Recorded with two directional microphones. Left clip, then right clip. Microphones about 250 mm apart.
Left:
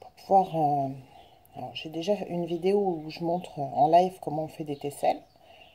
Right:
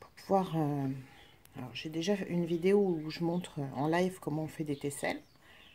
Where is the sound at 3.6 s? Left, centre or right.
Right.